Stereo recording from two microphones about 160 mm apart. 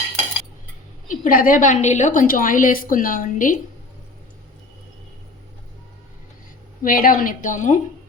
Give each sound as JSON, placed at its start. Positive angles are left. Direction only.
{"t": 1.0, "sound": "a woman's voice", "side_deg": 55}
{"t": 6.8, "sound": "a woman's voice", "side_deg": 60}